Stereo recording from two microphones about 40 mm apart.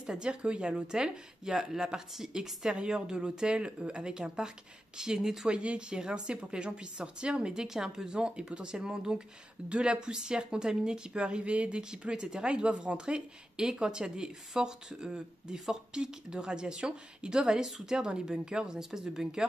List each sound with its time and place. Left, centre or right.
0.0 s speech: right
5.5 s speech: right